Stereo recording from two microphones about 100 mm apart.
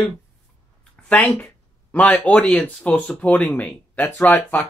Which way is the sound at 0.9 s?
15° left (ahead or behind).